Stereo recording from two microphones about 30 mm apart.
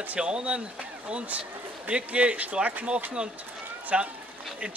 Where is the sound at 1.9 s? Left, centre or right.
Right.